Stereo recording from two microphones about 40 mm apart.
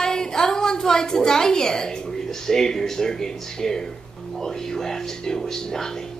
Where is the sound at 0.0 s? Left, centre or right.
Centre.